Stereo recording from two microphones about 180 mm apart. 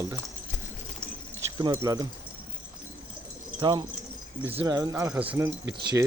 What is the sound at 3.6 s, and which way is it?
Speech, 20° right (ahead or behind).